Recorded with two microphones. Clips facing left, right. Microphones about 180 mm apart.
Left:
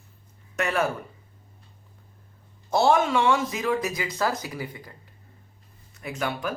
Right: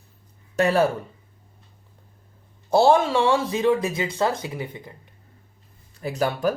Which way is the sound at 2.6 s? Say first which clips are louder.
Right 4 dB; 30° right (ahead or behind).